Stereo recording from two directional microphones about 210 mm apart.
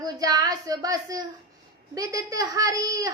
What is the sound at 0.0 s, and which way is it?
Speech, 15° right (ahead or behind).